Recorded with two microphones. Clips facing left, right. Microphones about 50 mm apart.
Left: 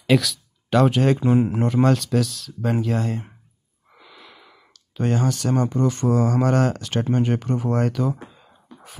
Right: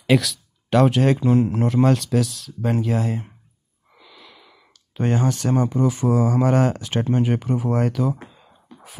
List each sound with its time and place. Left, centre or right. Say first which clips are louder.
0.0 s speech: even; centre
4.0 s wheeze: left 1 dB; centre
4.7 s speech: right 1 dB; right
5.5 s speech: right 1 dB; centre